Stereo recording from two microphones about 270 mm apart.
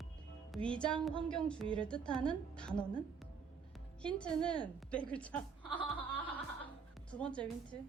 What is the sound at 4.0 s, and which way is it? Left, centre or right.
A woman's voice, centre.